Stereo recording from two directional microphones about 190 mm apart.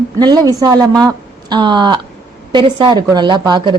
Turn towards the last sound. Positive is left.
turn(degrees=-25)  # may be behind; listen again after turning